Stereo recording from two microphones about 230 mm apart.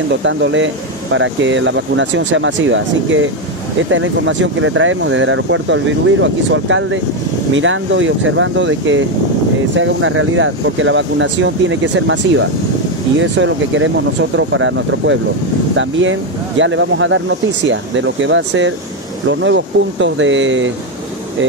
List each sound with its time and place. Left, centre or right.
0.1 s speech: right